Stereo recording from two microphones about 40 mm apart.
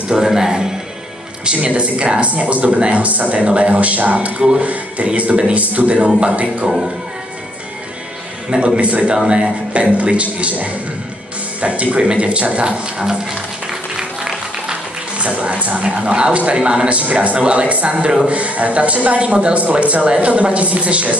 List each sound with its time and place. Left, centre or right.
0.1 s speech: centre
1.4 s speech: right
4.4 s speech: right
8.5 s speech: right
13.9 s a sound: centre
15.1 s speech: right
17.0 s speech: right